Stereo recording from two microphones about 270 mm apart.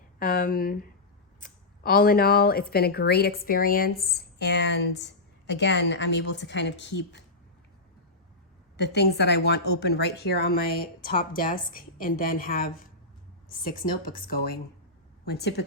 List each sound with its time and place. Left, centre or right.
0.2 s speech: left
8.7 s speech: left